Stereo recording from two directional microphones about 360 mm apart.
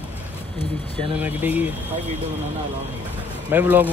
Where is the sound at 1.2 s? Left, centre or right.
Centre.